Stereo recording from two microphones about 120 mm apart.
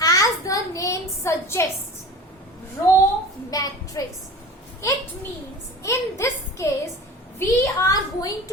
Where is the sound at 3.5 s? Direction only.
30° left (ahead or behind).